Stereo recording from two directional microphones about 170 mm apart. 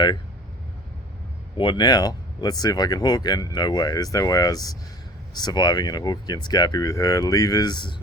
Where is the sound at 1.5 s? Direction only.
30° left (ahead or behind).